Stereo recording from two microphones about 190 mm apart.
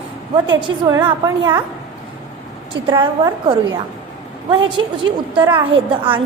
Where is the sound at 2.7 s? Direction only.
25° right (ahead or behind).